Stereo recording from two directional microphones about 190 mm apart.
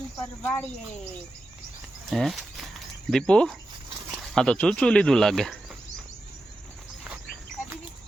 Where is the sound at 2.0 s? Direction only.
Centre (ahead or behind).